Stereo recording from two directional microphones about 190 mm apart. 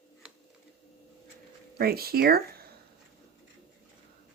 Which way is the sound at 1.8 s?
55° right (ahead or behind).